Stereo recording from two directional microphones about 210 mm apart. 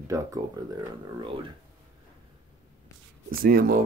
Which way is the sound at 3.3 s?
45° right (ahead or behind).